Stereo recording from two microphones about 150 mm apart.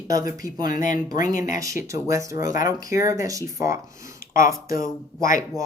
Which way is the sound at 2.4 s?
60° left (ahead or behind).